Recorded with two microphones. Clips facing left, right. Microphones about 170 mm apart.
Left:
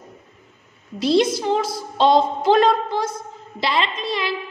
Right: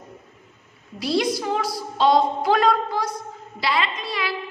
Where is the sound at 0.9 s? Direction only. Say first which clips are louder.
Left 5 dB; 25° left (ahead or behind).